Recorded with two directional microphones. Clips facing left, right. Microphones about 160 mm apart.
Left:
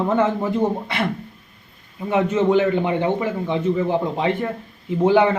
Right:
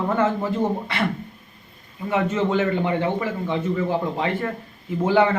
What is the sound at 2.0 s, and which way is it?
A man's voice, 20° left (ahead or behind).